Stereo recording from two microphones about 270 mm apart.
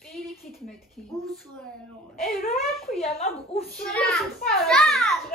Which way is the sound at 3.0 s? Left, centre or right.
Left.